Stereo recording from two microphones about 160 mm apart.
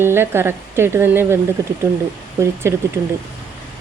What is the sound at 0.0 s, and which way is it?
Speech, 15° right (ahead or behind).